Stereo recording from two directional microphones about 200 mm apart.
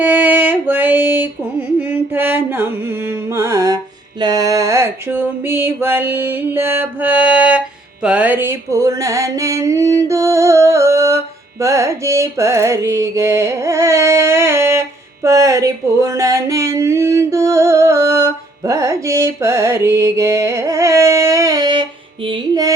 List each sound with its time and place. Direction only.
0.0 s a sound: 10° right (ahead or behind)
8.0 s mantra: 5° right (ahead or behind)
11.6 s carnatic music: 15° right (ahead or behind)
22.3 s music: 20° right (ahead or behind)